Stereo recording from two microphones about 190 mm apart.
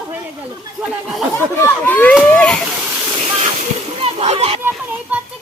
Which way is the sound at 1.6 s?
10° left (ahead or behind).